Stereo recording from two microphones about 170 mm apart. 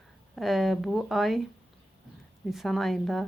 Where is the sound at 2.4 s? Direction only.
Centre (ahead or behind).